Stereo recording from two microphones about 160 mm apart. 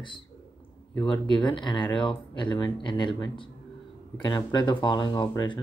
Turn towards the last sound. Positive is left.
turn(degrees=30)  # may be behind; listen again after turning